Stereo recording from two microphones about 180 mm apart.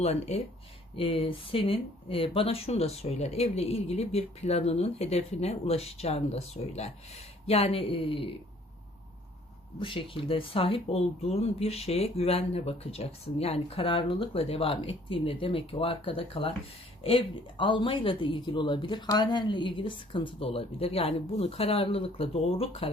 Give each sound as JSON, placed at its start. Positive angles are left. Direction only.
{"t": 0.0, "sound": "speech", "side_deg": 35}
{"t": 9.8, "sound": "speech", "side_deg": 30}